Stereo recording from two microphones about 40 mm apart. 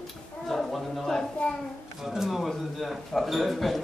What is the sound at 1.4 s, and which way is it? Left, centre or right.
Speech, left.